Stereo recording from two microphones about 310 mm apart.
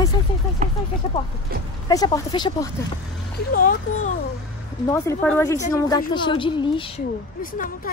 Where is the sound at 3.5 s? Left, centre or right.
Left.